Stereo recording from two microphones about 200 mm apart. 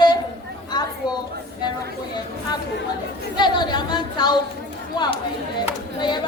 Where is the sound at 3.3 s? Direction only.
20° left (ahead or behind).